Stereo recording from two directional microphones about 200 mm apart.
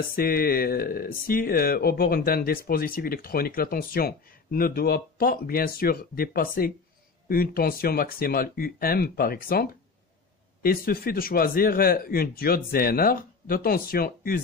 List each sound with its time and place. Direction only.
0.0 s speech: 50° left (ahead or behind)